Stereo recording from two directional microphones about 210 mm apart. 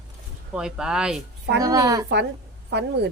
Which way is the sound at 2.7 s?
55° right (ahead or behind).